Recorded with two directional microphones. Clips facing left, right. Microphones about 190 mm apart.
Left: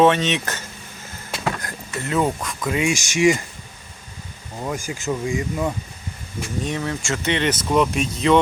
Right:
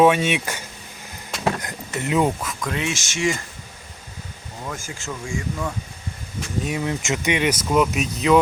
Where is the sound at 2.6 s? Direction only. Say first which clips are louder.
Left 6 dB; 10° left (ahead or behind).